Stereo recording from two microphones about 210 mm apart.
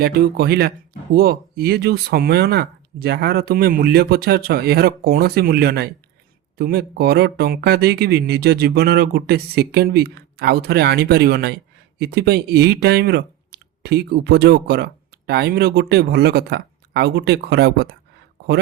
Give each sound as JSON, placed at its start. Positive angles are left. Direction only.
{"t": 0.0, "sound": "speech", "side_deg": -50}